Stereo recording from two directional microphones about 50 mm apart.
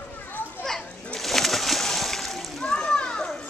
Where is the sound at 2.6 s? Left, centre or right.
Centre.